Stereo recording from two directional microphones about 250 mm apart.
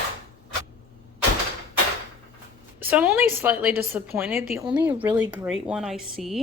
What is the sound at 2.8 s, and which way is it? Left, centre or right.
A woman's voice, centre.